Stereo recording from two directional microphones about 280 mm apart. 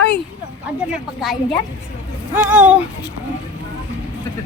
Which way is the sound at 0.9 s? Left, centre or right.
Centre.